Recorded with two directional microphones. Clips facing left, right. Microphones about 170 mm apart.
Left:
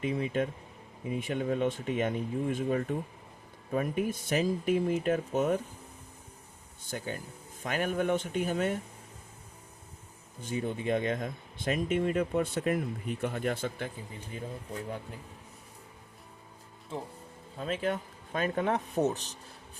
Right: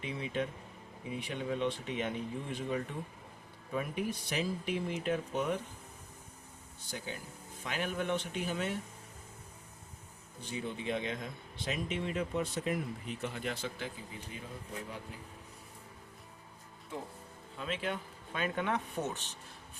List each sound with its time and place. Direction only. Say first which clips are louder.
0.0 s speech: left 6 dB; 45° left (ahead or behind)
6.9 s speech: left 5 dB; 50° left (ahead or behind)
10.4 s speech: left 6 dB; 50° left (ahead or behind)
17.6 s speech: left 5 dB; 40° left (ahead or behind)